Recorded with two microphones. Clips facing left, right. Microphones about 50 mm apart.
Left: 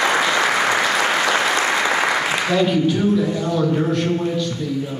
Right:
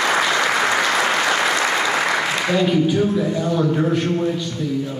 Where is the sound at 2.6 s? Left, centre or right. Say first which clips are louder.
Even; centre.